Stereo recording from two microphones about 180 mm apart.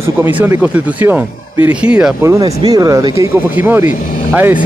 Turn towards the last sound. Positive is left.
turn(degrees=-10)  # may be behind; listen again after turning